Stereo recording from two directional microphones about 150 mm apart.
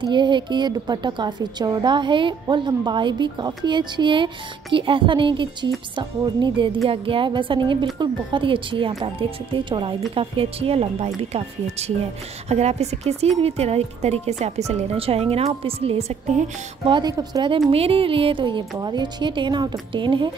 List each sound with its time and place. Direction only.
0.0 s a woman's voice: 30° right (ahead or behind)
16.9 s a woman's voice: 25° right (ahead or behind)